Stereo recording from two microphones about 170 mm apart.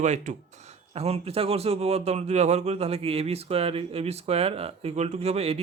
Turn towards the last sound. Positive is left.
turn(degrees=-35)  # may be behind; listen again after turning